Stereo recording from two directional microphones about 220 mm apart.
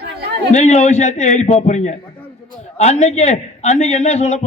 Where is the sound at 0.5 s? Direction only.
30° left (ahead or behind).